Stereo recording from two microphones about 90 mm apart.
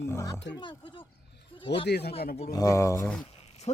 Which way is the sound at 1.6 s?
90° left.